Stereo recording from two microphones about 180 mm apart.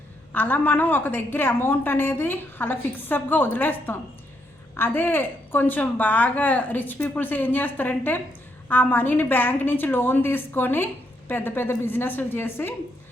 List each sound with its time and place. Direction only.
0.3 s a woman's voice: 10° left (ahead or behind)